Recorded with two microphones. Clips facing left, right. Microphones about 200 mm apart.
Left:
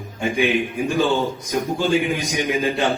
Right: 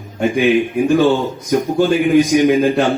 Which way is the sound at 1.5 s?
65° right (ahead or behind).